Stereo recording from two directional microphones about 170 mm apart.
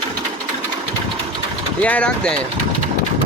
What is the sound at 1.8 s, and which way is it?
Speech, 5° left (ahead or behind).